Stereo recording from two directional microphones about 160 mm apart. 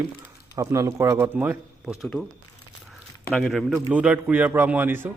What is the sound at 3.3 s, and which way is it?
Speech, centre (ahead or behind).